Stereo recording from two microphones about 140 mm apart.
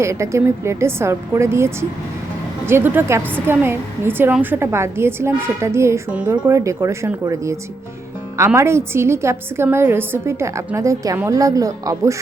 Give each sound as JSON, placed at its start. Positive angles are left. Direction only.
{"t": 0.0, "sound": "a woman's voice", "side_deg": -20}
{"t": 6.1, "sound": "a woman's voice", "side_deg": -10}
{"t": 6.4, "sound": "a woman's voice", "side_deg": -20}
{"t": 8.4, "sound": "a woman's voice", "side_deg": -20}